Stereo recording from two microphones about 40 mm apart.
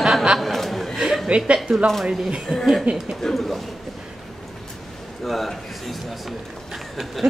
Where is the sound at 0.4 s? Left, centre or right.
Centre.